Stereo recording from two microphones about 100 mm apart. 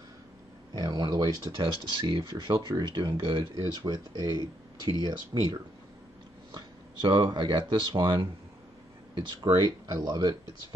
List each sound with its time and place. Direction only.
0.7 s speech: 45° right (ahead or behind)